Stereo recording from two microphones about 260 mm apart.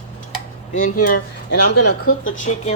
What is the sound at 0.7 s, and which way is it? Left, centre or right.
Speech, left.